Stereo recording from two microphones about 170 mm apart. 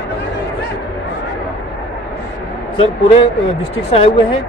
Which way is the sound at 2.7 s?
30° left (ahead or behind).